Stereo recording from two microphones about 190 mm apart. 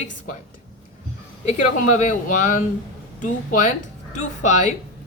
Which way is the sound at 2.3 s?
45° left (ahead or behind).